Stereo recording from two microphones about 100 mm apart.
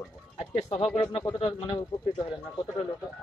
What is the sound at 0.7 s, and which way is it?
Speech, 65° left (ahead or behind).